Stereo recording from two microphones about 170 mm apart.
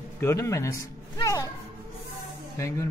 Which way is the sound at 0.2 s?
15° left (ahead or behind).